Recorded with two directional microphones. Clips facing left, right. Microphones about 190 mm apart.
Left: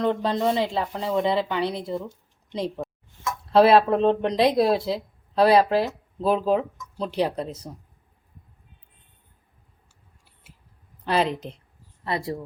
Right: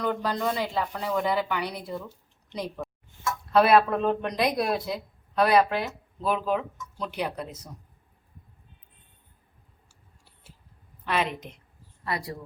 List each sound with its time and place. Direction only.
0.0 s speech: 25° left (ahead or behind)
11.0 s a woman's voice: 30° left (ahead or behind)